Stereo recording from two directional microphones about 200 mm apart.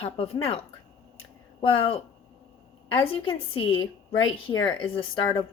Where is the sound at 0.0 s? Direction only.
30° left (ahead or behind).